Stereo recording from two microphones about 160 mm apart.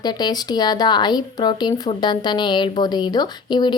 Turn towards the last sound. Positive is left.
turn(degrees=25)  # may be behind; listen again after turning